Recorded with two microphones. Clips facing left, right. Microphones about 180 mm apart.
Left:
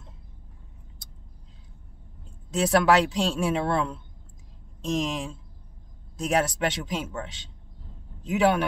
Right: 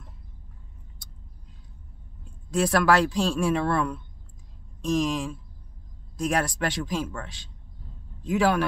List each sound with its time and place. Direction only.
2.5 s a man's voice: 20° left (ahead or behind)